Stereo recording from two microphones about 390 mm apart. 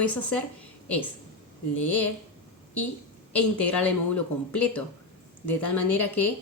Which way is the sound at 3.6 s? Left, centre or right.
Centre.